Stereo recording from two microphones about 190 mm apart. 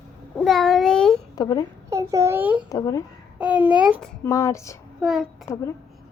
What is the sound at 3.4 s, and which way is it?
Speech, 5° right (ahead or behind).